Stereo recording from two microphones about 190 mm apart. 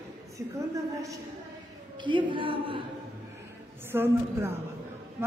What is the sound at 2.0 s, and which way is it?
Speech, 25° right (ahead or behind).